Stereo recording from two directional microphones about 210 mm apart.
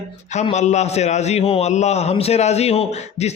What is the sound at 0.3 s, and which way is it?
A man's voice, 35° left (ahead or behind).